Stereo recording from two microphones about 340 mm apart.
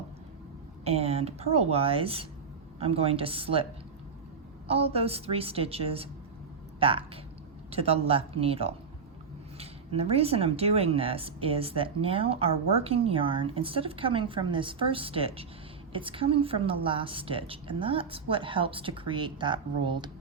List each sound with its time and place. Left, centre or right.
0.9 s speech: centre
4.7 s speech: centre